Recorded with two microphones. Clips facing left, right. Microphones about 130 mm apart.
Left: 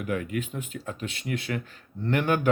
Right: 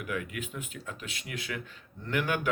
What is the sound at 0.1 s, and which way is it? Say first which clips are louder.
Speech: left 6 dB; 35° left (ahead or behind).